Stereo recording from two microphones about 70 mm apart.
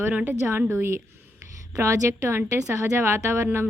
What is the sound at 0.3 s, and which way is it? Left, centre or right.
A woman's voice, right.